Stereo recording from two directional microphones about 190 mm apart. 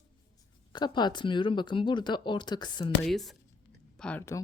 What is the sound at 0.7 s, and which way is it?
Speech, 25° left (ahead or behind).